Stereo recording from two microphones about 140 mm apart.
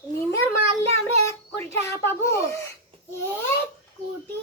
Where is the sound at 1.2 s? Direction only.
20° left (ahead or behind).